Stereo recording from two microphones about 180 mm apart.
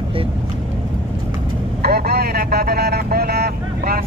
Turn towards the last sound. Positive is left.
turn(degrees=-60)  # may be behind; listen again after turning